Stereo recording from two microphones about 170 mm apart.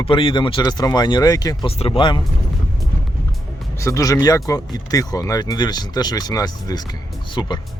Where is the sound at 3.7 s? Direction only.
20° left (ahead or behind).